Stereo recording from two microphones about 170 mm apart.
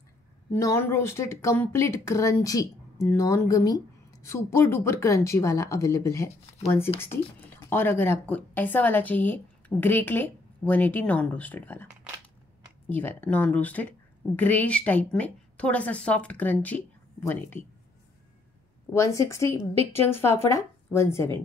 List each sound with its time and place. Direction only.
0.5 s speech: 15° left (ahead or behind)
12.9 s speech: 10° left (ahead or behind)
18.9 s speech: 15° left (ahead or behind)